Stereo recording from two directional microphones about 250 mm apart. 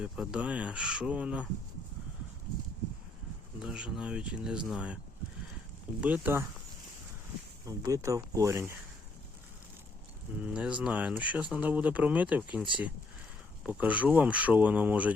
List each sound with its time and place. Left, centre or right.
0.0 s speech: centre
3.6 s speech: centre
6.0 s speech: centre
7.8 s speech: centre
10.4 s speech: centre
13.7 s speech: centre